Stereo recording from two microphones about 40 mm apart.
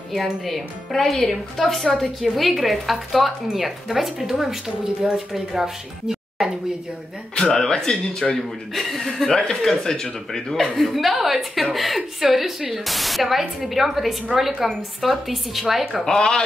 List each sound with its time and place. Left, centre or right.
0.1 s a woman's voice: centre
7.6 s a man's voice: centre
8.7 s a woman's voice: centre
16.1 s speech: centre